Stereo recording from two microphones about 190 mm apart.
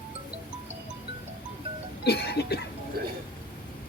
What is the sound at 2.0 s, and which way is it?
Cough, 55° left (ahead or behind).